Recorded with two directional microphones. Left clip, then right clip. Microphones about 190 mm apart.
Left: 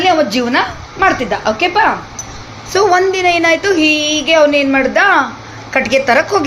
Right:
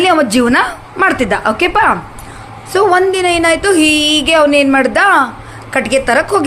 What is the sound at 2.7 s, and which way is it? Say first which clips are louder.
Speech: right 1 dB; 15° right (ahead or behind).